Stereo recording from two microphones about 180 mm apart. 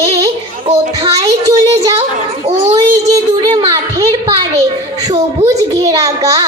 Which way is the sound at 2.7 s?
20° right (ahead or behind).